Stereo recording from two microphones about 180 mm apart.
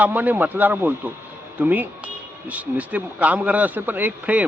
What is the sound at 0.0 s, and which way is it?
Speech, 10° right (ahead or behind).